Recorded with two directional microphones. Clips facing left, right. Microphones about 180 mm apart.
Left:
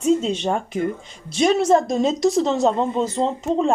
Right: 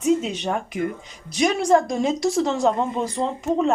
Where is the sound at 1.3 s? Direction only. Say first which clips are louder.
Left 2 dB; 25° left (ahead or behind).